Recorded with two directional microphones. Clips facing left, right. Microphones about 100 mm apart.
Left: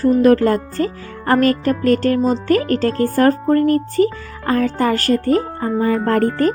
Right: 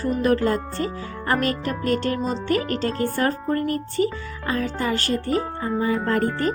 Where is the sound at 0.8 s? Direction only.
50° left (ahead or behind).